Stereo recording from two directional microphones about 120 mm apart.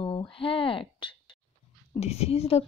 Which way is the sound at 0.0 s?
45° left (ahead or behind).